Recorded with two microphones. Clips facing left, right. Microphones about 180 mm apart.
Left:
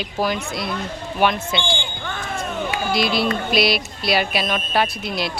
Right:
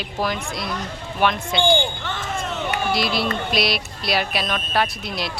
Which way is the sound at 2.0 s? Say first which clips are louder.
Even; 10° left (ahead or behind).